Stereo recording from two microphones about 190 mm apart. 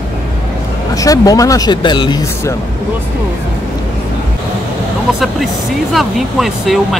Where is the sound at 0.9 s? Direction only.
20° left (ahead or behind).